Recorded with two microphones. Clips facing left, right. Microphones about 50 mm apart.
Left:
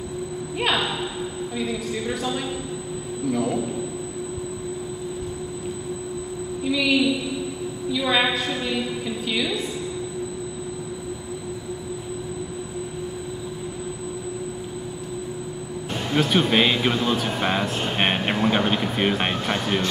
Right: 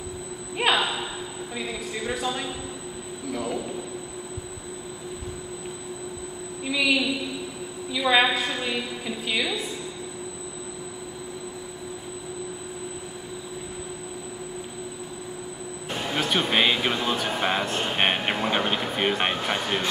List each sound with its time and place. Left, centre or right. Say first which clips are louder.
0.6 s a sound: right 1 dB; centre
1.6 s a woman's voice: left 4 dB; centre
3.3 s speech: left 6 dB; centre
6.6 s a woman's voice: left 3 dB; centre
15.9 s speech: left 4 dB; centre